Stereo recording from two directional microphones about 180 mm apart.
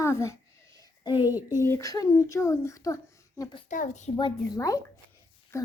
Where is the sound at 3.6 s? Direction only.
45° left (ahead or behind).